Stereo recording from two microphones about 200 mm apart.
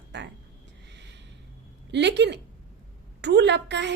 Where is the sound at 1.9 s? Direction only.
60° right (ahead or behind).